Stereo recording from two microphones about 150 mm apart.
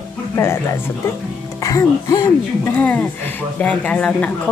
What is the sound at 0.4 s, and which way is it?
Speech, 15° left (ahead or behind).